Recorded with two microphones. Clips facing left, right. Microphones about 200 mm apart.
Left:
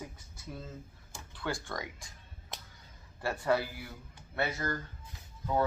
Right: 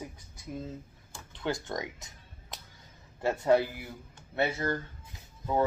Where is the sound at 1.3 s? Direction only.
20° right (ahead or behind).